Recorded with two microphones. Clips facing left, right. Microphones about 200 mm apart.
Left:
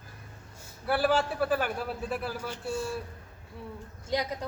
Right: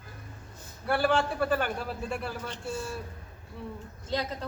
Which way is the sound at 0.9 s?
5° left (ahead or behind).